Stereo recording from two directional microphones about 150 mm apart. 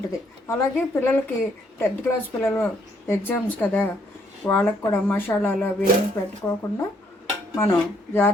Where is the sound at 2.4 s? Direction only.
20° left (ahead or behind).